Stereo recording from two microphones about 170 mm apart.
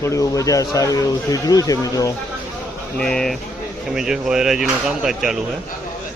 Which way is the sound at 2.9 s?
5° left (ahead or behind).